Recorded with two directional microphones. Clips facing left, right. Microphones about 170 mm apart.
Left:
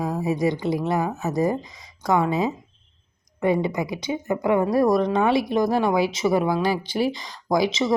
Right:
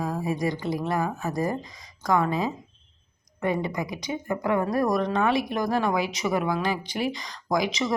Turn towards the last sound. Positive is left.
turn(degrees=25)  # may be behind; listen again after turning